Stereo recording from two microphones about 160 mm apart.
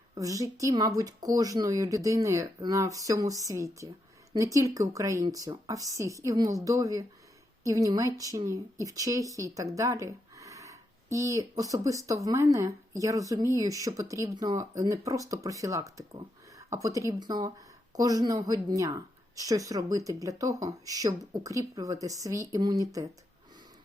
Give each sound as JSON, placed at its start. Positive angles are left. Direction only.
{"t": 0.1, "sound": "a woman's voice", "side_deg": -20}